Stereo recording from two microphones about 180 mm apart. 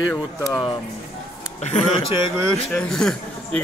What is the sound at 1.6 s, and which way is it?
Speech, 40° left (ahead or behind).